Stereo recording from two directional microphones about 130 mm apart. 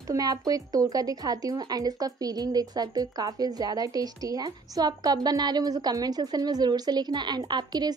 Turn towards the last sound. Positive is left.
turn(degrees=-30)  # may be behind; listen again after turning